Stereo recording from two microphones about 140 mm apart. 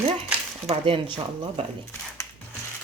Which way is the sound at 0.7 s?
40° right (ahead or behind).